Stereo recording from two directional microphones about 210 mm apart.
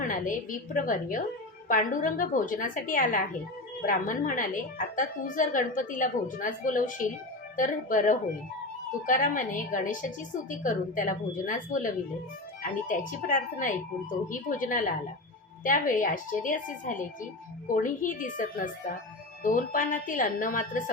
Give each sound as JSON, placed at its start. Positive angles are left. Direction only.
{"t": 0.0, "sound": "a woman's voice", "side_deg": 40}